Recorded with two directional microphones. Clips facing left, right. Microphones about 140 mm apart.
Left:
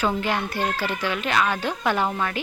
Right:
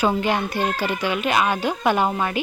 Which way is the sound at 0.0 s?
20° right (ahead or behind).